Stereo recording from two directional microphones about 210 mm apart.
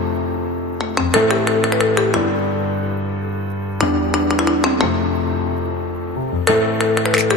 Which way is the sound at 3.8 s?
Centre (ahead or behind).